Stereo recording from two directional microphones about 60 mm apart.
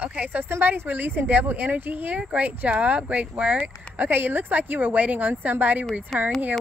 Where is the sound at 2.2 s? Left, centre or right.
Right.